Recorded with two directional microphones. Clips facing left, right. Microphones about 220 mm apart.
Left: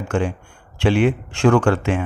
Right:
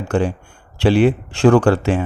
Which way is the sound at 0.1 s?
35° right (ahead or behind).